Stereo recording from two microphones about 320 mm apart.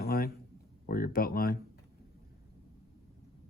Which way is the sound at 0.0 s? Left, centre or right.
Left.